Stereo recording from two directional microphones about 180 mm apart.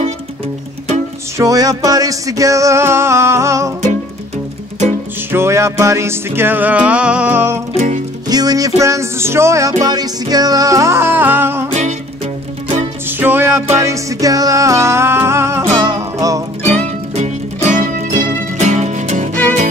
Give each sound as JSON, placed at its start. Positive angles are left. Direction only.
{"t": 1.4, "sound": "music", "side_deg": -20}
{"t": 5.3, "sound": "music", "side_deg": -15}
{"t": 7.7, "sound": "music", "side_deg": -40}
{"t": 8.3, "sound": "music", "side_deg": -20}
{"t": 13.2, "sound": "music", "side_deg": -10}
{"t": 16.8, "sound": "music", "side_deg": -35}